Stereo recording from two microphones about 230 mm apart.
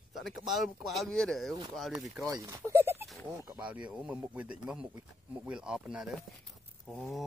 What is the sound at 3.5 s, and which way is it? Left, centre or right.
Speech, centre.